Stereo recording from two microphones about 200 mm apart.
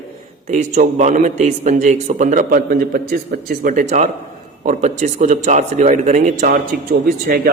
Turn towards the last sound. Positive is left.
turn(degrees=-50)  # may be behind; listen again after turning